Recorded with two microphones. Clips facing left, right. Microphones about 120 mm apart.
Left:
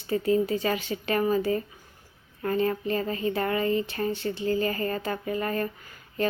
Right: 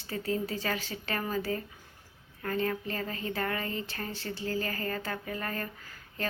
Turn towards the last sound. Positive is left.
turn(degrees=20)  # may be behind; listen again after turning